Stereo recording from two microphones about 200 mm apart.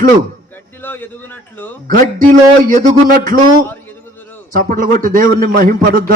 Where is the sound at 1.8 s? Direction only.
40° right (ahead or behind).